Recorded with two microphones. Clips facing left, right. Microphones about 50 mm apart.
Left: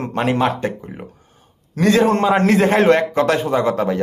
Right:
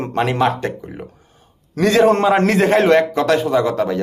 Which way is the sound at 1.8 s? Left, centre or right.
Centre.